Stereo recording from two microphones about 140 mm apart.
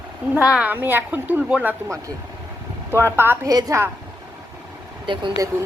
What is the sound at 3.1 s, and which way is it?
Speech, 15° right (ahead or behind).